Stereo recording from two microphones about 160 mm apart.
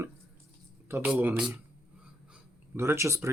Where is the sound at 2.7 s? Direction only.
15° right (ahead or behind).